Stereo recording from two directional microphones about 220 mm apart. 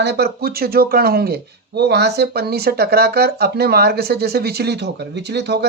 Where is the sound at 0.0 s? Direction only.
45° right (ahead or behind).